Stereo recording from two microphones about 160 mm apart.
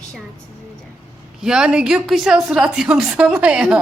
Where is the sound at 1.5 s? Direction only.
5° right (ahead or behind).